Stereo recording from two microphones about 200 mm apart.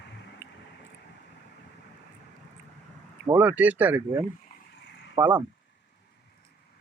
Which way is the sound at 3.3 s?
10° right (ahead or behind).